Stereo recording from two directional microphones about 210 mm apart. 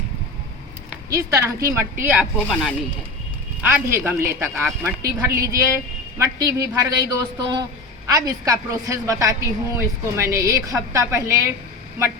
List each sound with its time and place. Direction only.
1.1 s speech: 15° right (ahead or behind)